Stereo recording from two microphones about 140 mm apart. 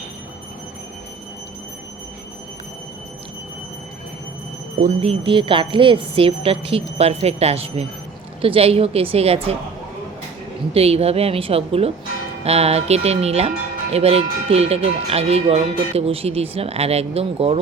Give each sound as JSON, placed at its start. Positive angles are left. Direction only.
{"t": 5.0, "sound": "speech", "side_deg": -35}
{"t": 10.8, "sound": "speech", "side_deg": -45}